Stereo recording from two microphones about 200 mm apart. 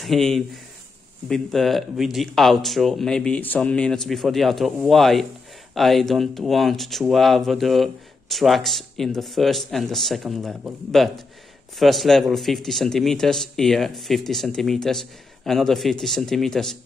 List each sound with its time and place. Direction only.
0.0 s speech: centre (ahead or behind)